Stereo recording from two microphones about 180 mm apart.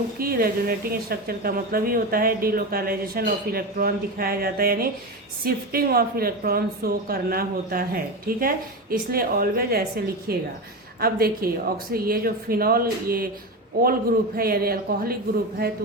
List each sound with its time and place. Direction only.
0.2 s a woman's voice: 55° right (ahead or behind)
14.3 s a woman's voice: 55° right (ahead or behind)